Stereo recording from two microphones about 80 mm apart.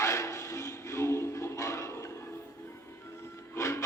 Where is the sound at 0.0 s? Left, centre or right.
Left.